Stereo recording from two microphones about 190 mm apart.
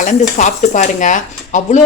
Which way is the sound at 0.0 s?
40° left (ahead or behind).